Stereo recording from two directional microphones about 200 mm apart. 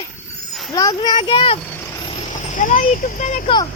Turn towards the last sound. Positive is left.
turn(degrees=40)  # may be behind; listen again after turning